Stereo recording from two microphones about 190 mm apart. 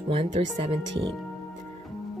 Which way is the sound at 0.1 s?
30° right (ahead or behind).